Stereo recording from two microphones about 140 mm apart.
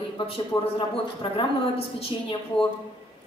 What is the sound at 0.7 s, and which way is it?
A woman's voice, 40° left (ahead or behind).